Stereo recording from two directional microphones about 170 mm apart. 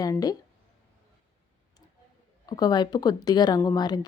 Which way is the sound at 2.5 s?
25° left (ahead or behind).